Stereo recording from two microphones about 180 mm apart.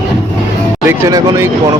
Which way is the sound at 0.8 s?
15° right (ahead or behind).